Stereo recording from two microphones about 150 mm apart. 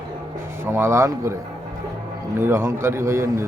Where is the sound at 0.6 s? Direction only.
15° right (ahead or behind).